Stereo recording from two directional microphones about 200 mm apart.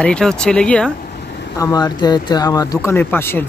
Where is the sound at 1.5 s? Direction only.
20° left (ahead or behind).